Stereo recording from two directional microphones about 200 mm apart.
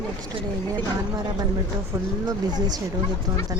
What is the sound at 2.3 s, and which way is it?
Speech, 20° right (ahead or behind).